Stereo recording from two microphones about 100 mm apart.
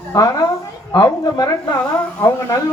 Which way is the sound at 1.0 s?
40° left (ahead or behind).